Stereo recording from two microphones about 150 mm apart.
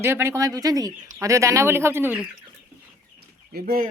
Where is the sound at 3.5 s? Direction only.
90° right.